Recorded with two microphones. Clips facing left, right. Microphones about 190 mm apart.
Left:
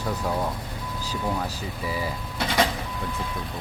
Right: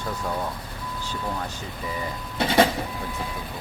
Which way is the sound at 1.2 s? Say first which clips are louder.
Left 4 dB; 5° left (ahead or behind).